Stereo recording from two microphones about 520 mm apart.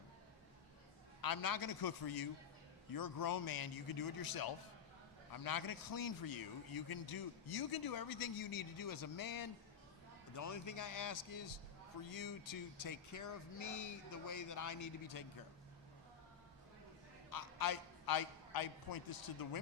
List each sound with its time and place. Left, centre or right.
1.2 s a man's voice: left
17.2 s a man's voice: left